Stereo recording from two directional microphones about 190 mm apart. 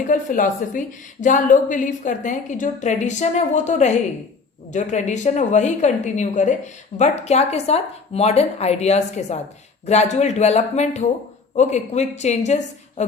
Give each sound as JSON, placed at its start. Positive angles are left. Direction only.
{"t": 0.1, "sound": "a woman's voice", "side_deg": 40}